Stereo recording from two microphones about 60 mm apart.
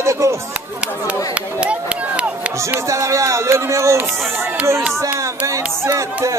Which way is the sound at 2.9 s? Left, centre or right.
Right.